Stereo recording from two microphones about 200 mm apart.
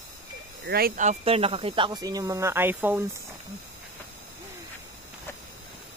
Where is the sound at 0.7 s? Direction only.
50° right (ahead or behind); by 3.1 s 10° right (ahead or behind).